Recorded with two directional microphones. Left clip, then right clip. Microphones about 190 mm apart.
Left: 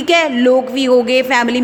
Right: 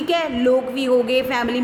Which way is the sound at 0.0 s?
35° left (ahead or behind).